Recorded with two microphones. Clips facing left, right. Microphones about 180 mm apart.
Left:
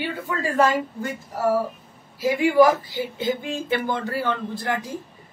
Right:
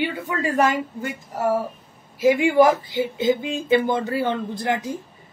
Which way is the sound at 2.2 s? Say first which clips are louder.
Right 1 dB; 20° right (ahead or behind).